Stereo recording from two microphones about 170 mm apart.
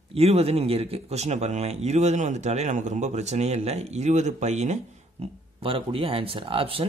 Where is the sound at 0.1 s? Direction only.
35° right (ahead or behind).